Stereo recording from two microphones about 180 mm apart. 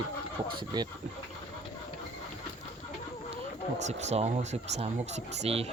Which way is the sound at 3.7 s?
40° right (ahead or behind).